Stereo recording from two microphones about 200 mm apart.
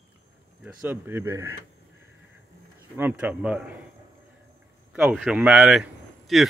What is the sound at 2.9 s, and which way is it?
Speech, 10° right (ahead or behind).